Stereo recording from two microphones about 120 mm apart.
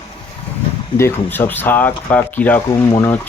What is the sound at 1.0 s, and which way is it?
Speech, 20° left (ahead or behind).